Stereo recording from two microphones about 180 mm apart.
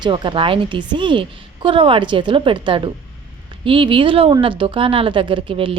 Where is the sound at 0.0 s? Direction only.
25° right (ahead or behind).